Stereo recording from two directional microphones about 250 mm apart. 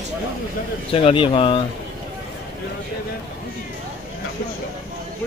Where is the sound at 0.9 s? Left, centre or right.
Left.